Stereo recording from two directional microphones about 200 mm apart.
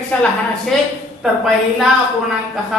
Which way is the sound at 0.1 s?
5° left (ahead or behind).